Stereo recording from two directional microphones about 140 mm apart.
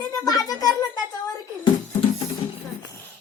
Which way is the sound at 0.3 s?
25° left (ahead or behind).